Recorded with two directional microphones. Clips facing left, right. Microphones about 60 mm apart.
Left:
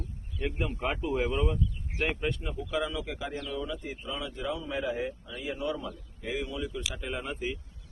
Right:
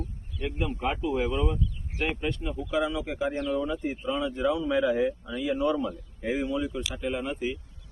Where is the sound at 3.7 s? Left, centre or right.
Right.